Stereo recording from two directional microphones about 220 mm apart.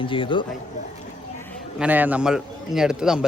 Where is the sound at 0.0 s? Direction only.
20° left (ahead or behind).